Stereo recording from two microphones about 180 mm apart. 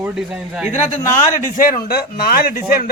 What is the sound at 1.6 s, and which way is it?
A man's voice, 55° left (ahead or behind).